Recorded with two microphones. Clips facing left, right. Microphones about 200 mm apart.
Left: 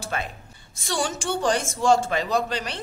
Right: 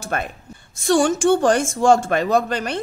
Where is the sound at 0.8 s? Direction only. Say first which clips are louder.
Right 11 dB; 50° right (ahead or behind).